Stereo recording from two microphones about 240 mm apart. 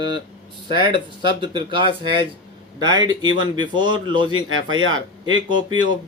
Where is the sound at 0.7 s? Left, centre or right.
Centre.